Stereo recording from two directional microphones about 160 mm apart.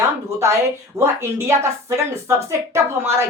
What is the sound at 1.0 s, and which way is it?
A woman's voice, 15° right (ahead or behind).